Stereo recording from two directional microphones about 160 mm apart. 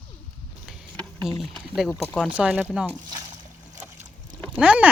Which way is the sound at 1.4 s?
Centre (ahead or behind).